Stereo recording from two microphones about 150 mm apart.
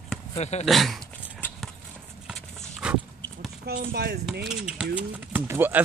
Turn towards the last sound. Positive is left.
turn(degrees=-15)  # may be behind; listen again after turning